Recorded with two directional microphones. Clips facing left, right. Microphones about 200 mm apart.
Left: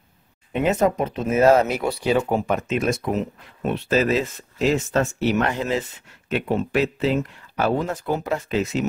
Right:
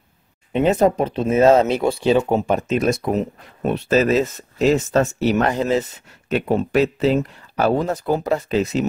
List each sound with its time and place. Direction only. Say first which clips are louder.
0.5 s speech: right 4 dB; 30° right (ahead or behind)